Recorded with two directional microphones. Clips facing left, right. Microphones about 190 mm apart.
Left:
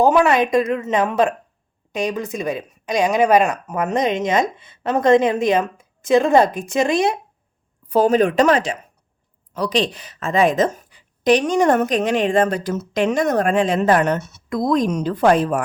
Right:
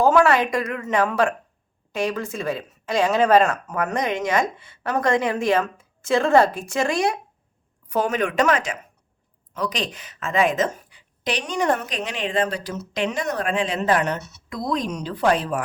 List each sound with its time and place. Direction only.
0.0 s speech: 20° left (ahead or behind)
7.9 s a woman's voice: 30° left (ahead or behind)